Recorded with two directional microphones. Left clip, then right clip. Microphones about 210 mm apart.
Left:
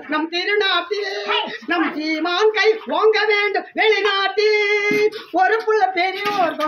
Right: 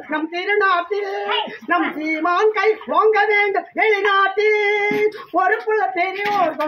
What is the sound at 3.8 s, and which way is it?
Speech, 15° right (ahead or behind).